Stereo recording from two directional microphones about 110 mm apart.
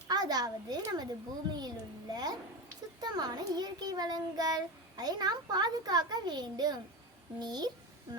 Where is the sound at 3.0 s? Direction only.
40° right (ahead or behind).